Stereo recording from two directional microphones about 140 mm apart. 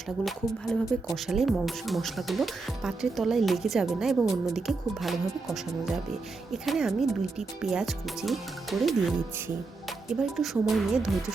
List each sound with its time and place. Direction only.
0.3 s speech: centre (ahead or behind)
6.5 s speech: centre (ahead or behind)
10.2 s speech: centre (ahead or behind)